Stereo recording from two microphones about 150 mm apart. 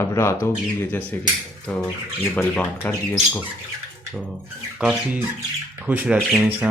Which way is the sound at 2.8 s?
10° left (ahead or behind).